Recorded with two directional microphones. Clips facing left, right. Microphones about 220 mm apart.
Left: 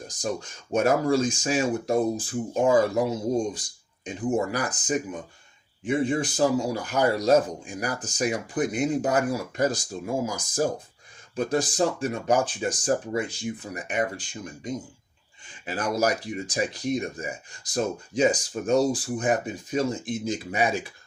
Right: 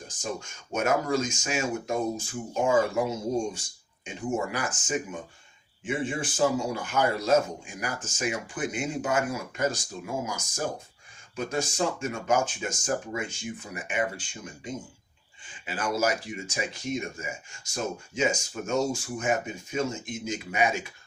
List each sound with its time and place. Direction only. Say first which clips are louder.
0.1 s speech: left 4 dB; 35° left (ahead or behind)
15.6 s speech: left 2 dB; 40° left (ahead or behind)